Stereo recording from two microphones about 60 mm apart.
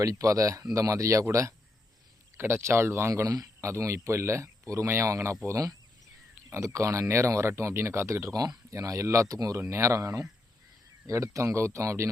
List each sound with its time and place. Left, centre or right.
0.0 s speech: right
2.4 s speech: right
3.1 s speech: right
9.3 s speech: right
9.6 s speech: right